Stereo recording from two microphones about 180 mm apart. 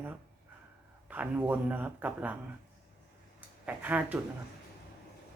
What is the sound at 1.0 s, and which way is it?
Speech, 10° right (ahead or behind).